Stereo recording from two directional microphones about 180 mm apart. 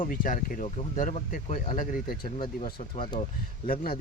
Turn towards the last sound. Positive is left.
turn(degrees=55)  # may be behind; listen again after turning